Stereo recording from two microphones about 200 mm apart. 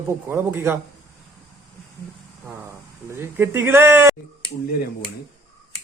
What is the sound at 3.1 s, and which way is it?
A man's voice, 15° right (ahead or behind).